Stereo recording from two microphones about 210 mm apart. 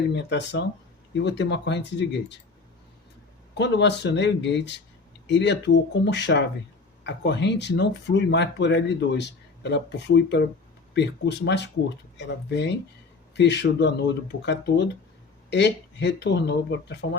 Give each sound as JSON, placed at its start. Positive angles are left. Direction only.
{"t": 0.1, "sound": "speech", "side_deg": 55}
{"t": 3.5, "sound": "speech", "side_deg": 55}